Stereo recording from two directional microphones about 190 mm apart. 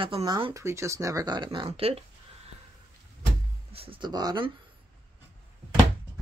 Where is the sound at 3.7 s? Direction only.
30° right (ahead or behind).